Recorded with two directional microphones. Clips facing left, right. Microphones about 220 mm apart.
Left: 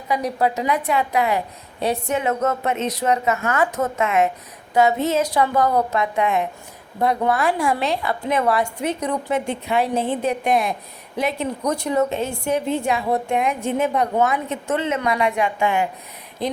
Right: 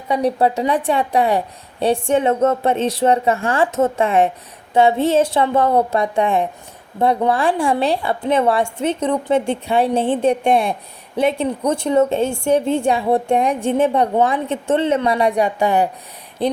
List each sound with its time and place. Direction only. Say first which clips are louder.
0.1 s a woman's voice: right 4 dB; 30° right (ahead or behind)